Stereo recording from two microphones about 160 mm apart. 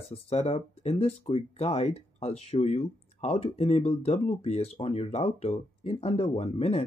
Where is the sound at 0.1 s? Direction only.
40° left (ahead or behind).